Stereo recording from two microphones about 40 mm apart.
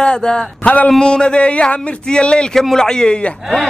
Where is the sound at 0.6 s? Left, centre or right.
Left.